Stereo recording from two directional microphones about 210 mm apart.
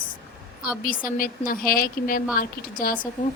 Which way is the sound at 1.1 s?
40° left (ahead or behind).